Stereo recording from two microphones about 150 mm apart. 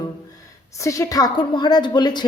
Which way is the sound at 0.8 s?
20° left (ahead or behind).